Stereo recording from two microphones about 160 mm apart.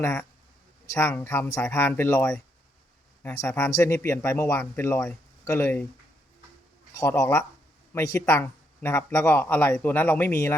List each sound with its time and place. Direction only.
0.9 s speech: 15° left (ahead or behind)
6.9 s speech: 15° left (ahead or behind)